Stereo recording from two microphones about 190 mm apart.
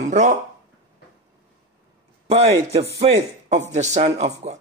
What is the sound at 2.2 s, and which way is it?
Speech, 30° right (ahead or behind).